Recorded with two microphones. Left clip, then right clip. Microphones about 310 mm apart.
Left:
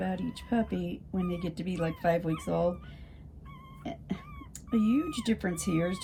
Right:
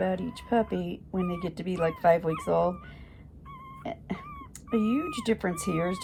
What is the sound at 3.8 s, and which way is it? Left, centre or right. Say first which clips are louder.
Speech: right 4 dB; centre.